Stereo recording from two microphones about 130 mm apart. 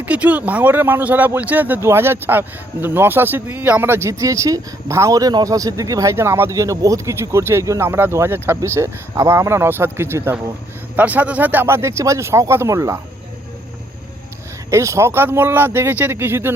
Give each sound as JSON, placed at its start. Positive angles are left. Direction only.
{"t": 0.0, "sound": "speech", "side_deg": -10}
{"t": 14.7, "sound": "speech", "side_deg": -20}